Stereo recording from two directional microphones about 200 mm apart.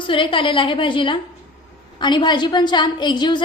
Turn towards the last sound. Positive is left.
turn(degrees=20)  # may be behind; listen again after turning